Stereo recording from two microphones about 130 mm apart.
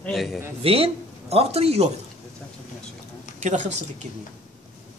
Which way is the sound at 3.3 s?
70° right (ahead or behind).